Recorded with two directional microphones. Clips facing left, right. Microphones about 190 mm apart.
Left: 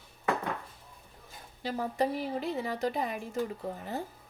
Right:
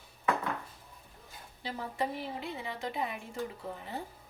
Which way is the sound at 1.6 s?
45° left (ahead or behind).